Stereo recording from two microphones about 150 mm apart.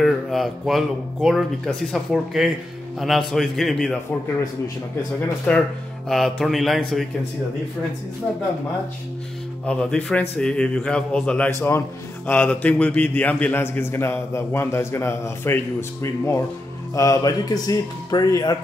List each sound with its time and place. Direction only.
0.0 s speech: centre (ahead or behind)
5.5 s a man's voice: 10° left (ahead or behind)
9.7 s a man's voice: 5° left (ahead or behind); by 18.6 s 25° left (ahead or behind)